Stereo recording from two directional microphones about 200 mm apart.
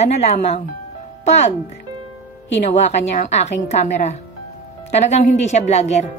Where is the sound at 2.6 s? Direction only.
35° left (ahead or behind).